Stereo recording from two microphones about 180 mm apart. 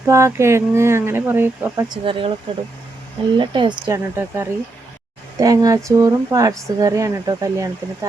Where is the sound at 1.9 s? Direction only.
30° right (ahead or behind).